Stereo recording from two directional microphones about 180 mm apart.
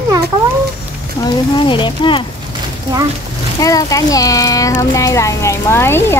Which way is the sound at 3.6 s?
20° left (ahead or behind).